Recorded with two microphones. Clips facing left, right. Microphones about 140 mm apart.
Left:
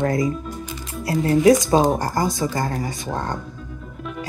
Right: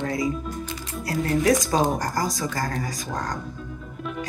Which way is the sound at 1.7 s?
25° left (ahead or behind).